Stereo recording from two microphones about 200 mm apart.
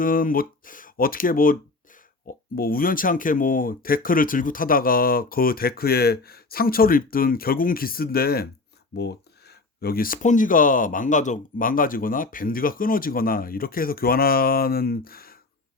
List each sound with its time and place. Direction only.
0.0 s speech: 45° left (ahead or behind)